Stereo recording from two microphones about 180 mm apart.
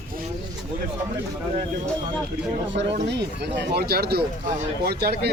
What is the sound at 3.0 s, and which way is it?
A man's voice, 70° right (ahead or behind).